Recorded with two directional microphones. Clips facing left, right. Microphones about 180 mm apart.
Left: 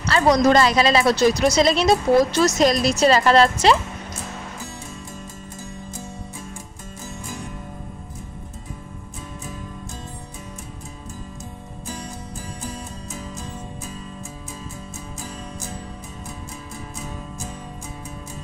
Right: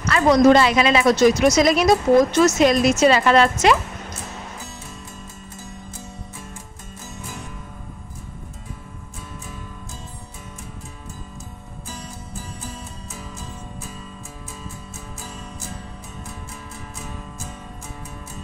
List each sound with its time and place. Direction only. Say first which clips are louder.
0.0 s a woman's voice: right 2 dB; 35° left (ahead or behind)